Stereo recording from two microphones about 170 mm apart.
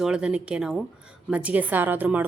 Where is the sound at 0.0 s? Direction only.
5° right (ahead or behind).